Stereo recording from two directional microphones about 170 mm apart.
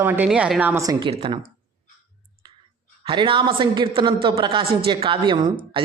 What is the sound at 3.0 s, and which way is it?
Speech, 30° right (ahead or behind).